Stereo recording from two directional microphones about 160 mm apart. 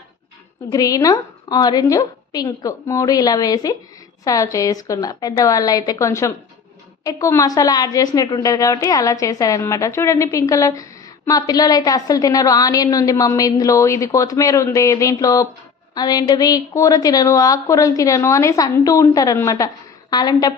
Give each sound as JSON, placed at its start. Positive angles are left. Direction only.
{"t": 0.7, "sound": "a woman's voice", "side_deg": 20}